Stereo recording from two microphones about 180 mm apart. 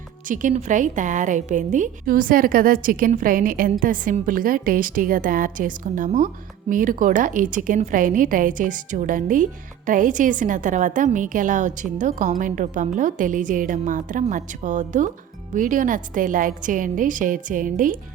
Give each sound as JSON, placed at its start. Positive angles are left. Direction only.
{"t": 0.3, "sound": "a woman's voice", "side_deg": -45}